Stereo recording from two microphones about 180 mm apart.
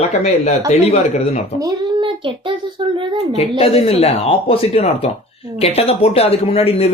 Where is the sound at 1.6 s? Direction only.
20° right (ahead or behind).